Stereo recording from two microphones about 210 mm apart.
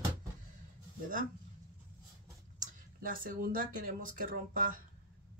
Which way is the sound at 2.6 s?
40° right (ahead or behind).